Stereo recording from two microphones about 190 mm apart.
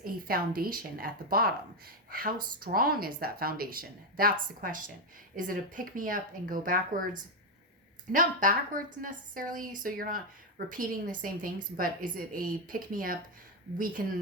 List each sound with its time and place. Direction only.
0.0 s a woman's voice: 50° right (ahead or behind)
8.1 s a woman's voice: 45° right (ahead or behind)